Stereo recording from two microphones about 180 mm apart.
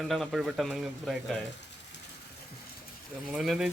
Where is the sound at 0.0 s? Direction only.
Centre (ahead or behind).